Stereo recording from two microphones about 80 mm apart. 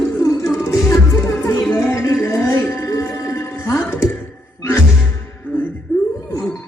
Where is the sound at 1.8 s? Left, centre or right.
Left.